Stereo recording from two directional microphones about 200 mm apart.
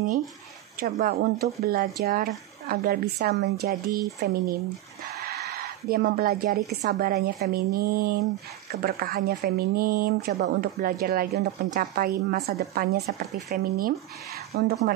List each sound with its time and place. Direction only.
0.7 s speech: 50° right (ahead or behind)